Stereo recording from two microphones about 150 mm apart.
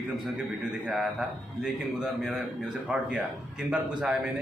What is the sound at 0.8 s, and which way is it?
A man's voice, 5° right (ahead or behind).